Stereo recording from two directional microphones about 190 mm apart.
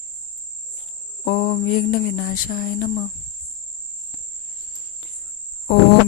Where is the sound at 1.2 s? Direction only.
50° left (ahead or behind).